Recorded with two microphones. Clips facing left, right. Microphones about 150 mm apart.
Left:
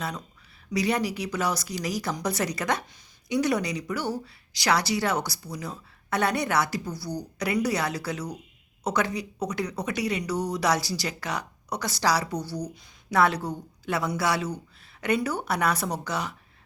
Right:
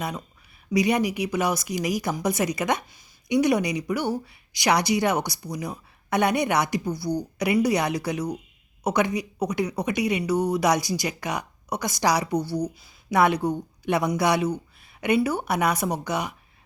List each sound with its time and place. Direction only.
0.7 s speech: 15° right (ahead or behind)
12.4 s speech: 10° left (ahead or behind)
12.6 s speech: 15° right (ahead or behind)